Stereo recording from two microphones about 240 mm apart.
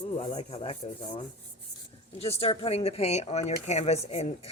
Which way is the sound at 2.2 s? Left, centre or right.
Left.